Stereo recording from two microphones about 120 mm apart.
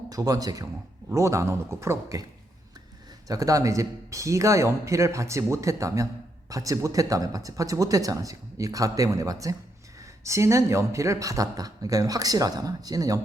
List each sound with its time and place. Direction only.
0.1 s speech: 30° right (ahead or behind)
3.2 s speech: 30° right (ahead or behind)